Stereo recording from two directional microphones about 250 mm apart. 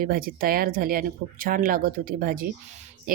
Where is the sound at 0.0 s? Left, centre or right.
Right.